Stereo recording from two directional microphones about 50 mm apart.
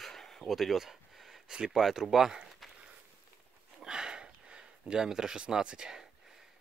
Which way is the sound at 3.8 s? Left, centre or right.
Centre.